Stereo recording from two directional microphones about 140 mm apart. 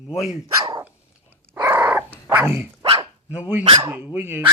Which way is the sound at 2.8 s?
40° right (ahead or behind).